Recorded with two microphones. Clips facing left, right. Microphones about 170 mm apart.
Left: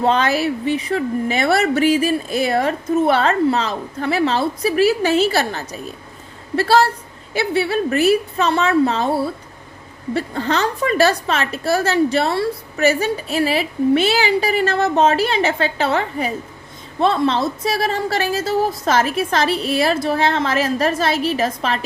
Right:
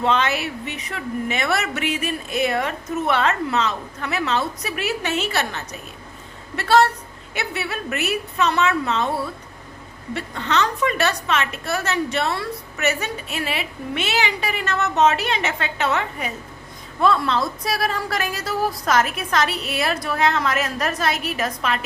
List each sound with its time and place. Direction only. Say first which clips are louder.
0.0 s a woman's voice: left 4 dB; 35° left (ahead or behind)